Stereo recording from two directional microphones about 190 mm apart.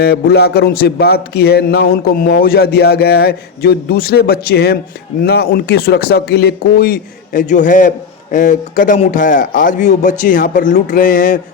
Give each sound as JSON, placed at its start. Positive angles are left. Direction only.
{"t": 0.0, "sound": "a man's voice", "side_deg": 55}